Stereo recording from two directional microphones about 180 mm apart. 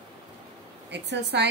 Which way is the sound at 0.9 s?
70° right (ahead or behind).